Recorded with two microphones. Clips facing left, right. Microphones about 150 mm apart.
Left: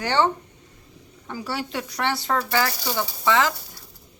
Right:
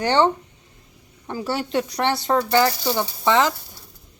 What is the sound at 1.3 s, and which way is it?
Speech, 25° right (ahead or behind).